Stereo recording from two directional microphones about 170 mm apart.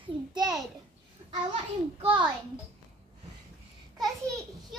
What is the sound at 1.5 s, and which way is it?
Speech, 30° right (ahead or behind).